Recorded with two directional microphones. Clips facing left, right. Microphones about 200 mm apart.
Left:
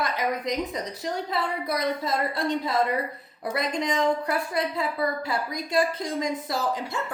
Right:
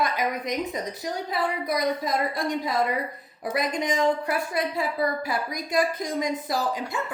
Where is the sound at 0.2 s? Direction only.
20° right (ahead or behind).